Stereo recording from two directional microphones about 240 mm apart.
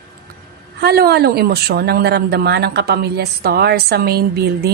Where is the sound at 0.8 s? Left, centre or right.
Right.